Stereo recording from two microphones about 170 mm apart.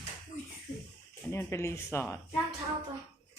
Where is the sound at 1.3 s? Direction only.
15° left (ahead or behind).